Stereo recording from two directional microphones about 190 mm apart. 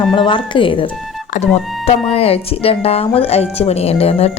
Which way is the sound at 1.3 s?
45° left (ahead or behind).